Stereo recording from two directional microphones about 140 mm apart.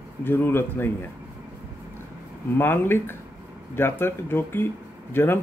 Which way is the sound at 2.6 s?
15° left (ahead or behind).